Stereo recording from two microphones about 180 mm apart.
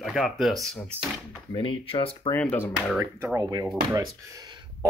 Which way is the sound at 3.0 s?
15° right (ahead or behind).